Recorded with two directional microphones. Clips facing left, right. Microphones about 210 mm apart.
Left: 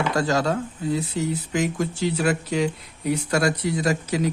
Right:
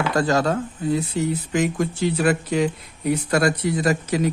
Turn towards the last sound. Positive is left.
turn(degrees=-55)  # may be behind; listen again after turning